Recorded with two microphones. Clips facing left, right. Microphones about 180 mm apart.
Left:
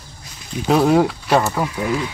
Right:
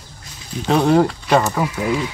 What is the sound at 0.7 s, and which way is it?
Speech, 5° left (ahead or behind).